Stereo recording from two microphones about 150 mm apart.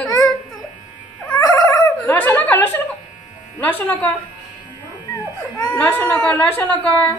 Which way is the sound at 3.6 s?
15° left (ahead or behind).